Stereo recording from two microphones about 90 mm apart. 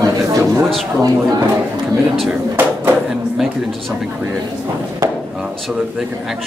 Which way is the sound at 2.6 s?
20° right (ahead or behind).